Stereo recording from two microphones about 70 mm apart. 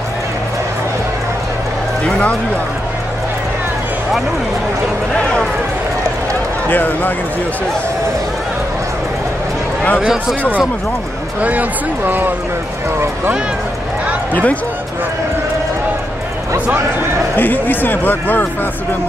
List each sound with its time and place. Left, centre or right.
2.0 s speech: centre
6.7 s speech: left
12.1 s speech: right
14.3 s speech: left
16.5 s speech: right
17.4 s speech: left